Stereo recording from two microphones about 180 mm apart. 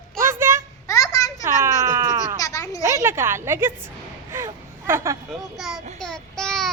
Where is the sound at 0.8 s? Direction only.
20° left (ahead or behind).